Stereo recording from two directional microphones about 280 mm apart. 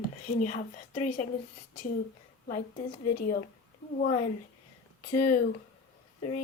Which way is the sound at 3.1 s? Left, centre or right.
Left.